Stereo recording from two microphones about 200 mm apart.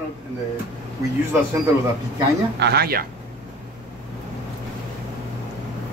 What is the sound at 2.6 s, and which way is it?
Speech, 50° right (ahead or behind).